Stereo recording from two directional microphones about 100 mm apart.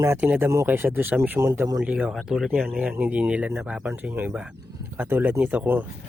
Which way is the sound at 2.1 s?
Centre (ahead or behind).